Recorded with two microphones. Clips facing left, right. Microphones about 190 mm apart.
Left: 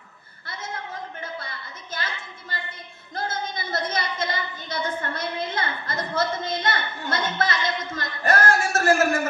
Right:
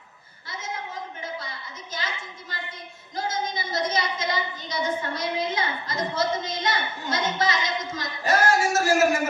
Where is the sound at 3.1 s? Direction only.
55° left (ahead or behind).